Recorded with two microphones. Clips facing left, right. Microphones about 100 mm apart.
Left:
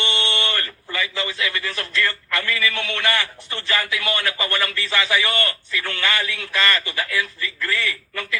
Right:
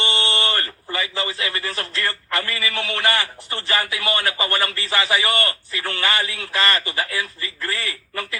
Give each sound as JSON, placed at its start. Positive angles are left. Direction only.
{"t": 0.0, "sound": "a man's voice", "side_deg": -35}